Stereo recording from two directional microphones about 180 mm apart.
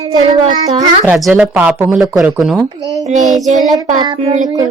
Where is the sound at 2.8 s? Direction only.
20° right (ahead or behind).